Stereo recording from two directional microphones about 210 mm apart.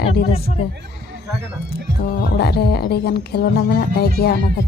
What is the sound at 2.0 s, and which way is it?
Speech, 50° left (ahead or behind).